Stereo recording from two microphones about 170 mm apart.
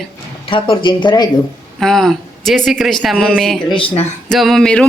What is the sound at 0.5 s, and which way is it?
Speech, 30° left (ahead or behind).